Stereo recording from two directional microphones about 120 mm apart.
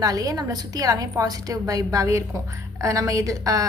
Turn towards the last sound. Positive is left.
turn(degrees=-30)  # may be behind; listen again after turning